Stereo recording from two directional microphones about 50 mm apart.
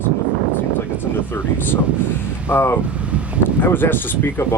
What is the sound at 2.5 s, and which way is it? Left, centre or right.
Speech, left.